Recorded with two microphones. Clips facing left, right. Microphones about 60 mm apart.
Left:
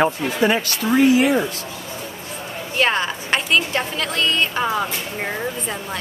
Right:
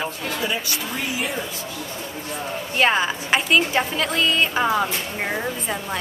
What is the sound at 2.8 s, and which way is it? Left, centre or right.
A woman's voice, centre.